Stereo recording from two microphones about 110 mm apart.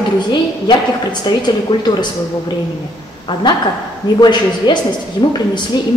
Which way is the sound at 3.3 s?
50° left (ahead or behind).